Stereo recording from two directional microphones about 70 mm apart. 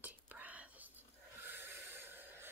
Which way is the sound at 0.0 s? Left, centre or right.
Right.